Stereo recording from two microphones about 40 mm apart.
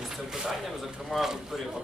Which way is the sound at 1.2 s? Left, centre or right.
Centre.